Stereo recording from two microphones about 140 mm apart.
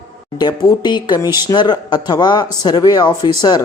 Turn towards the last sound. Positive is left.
turn(degrees=30)  # may be behind; listen again after turning